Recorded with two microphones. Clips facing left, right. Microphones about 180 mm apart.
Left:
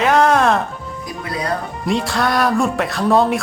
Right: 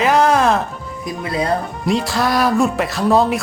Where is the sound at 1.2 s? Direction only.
25° right (ahead or behind).